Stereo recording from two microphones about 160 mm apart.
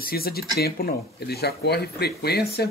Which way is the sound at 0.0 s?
70° left (ahead or behind).